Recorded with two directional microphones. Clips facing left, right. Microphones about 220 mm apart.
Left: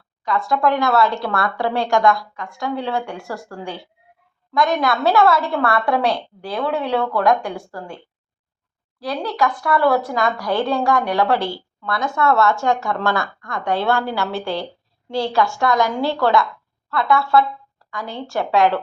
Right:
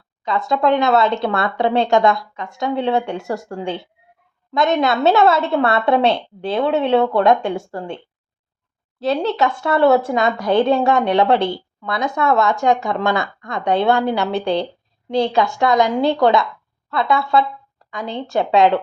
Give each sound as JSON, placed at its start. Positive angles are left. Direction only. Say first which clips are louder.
{"t": 0.3, "sound": "speech", "louder": "right 2 dB", "side_deg": -20}
{"t": 9.0, "sound": "speech", "louder": "right 4 dB", "side_deg": -25}